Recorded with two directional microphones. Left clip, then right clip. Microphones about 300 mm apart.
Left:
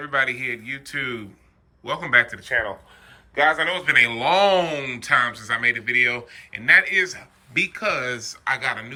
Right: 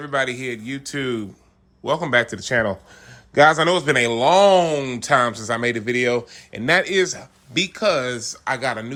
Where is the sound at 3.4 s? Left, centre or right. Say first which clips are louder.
Right 5 dB; right.